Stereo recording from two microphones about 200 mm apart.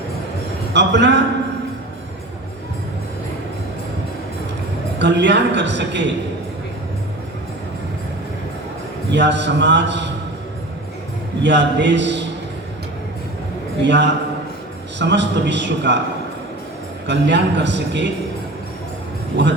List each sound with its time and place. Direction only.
0.7 s a man's voice: 60° right (ahead or behind)
4.9 s a man's voice: 60° right (ahead or behind)
9.1 s a man's voice: 60° right (ahead or behind)
11.4 s a man's voice: 60° right (ahead or behind)
13.8 s a man's voice: 60° right (ahead or behind)
17.1 s a man's voice: 60° right (ahead or behind)
19.3 s a man's voice: 60° right (ahead or behind)